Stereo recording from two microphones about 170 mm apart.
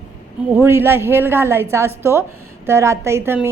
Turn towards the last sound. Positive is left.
turn(degrees=-15)  # may be behind; listen again after turning